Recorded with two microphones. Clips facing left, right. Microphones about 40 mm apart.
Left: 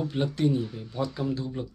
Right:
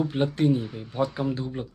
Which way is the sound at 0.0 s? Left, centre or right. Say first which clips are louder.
Right 3 dB; centre.